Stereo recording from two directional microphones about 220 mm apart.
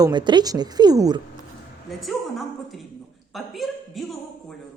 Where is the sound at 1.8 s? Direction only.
Centre (ahead or behind).